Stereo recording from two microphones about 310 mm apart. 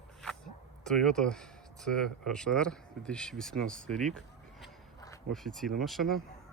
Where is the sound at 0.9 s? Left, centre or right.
Centre.